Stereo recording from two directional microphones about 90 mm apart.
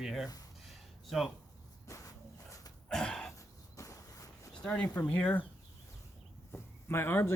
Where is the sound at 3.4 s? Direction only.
35° left (ahead or behind).